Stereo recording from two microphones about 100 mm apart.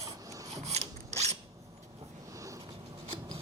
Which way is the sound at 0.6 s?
90° right.